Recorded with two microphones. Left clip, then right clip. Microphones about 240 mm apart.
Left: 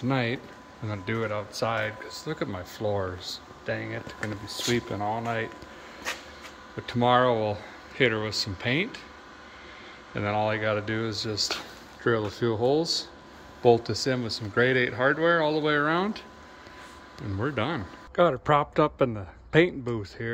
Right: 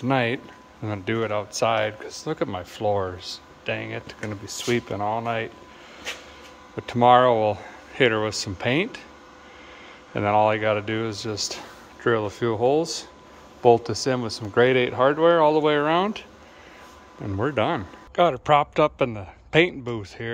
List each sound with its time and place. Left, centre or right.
0.0 s speech: centre
6.9 s speech: centre
10.1 s speech: centre
17.4 s a man's voice: centre